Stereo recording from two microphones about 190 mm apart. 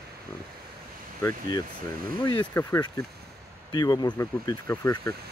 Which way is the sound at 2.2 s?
20° left (ahead or behind).